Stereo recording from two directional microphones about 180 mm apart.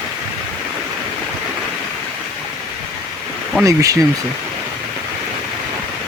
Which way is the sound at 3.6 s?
20° right (ahead or behind).